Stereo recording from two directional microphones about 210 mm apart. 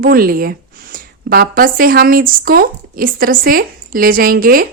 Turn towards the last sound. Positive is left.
turn(degrees=-45)  # may be behind; listen again after turning